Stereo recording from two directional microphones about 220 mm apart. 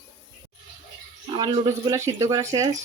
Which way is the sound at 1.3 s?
20° right (ahead or behind).